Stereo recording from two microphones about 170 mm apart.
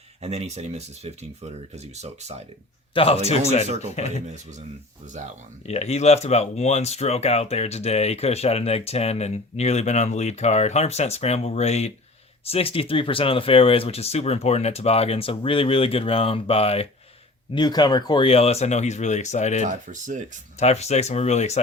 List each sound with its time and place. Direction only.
0.2 s speech: 40° right (ahead or behind)
2.9 s a man's voice: 35° left (ahead or behind)
5.6 s speech: 40° left (ahead or behind)
19.6 s speech: 50° right (ahead or behind)
20.6 s speech: 40° left (ahead or behind)